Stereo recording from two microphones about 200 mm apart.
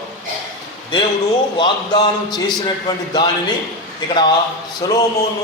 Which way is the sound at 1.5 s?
20° left (ahead or behind).